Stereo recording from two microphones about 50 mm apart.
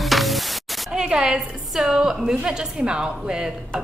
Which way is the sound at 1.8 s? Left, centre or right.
Centre.